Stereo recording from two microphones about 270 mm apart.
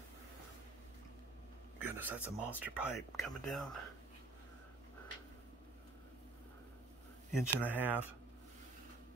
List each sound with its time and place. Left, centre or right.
1.8 s a sound: centre
2.1 s speech: centre
2.5 s speech: centre
7.3 s speech: centre
7.7 s speech: centre